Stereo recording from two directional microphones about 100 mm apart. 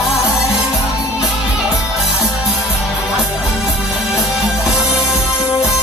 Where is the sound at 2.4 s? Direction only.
Centre (ahead or behind).